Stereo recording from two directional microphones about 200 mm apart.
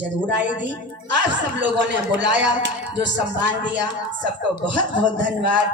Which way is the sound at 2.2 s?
60° right (ahead or behind).